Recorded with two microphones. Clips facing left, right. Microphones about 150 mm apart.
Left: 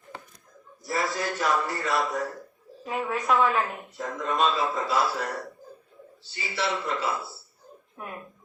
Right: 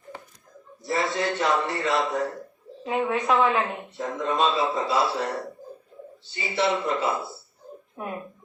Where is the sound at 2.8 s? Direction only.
25° right (ahead or behind).